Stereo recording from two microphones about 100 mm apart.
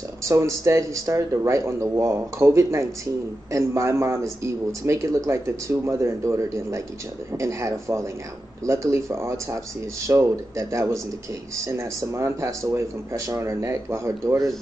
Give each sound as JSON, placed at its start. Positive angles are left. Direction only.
{"t": 0.2, "sound": "speech", "side_deg": -30}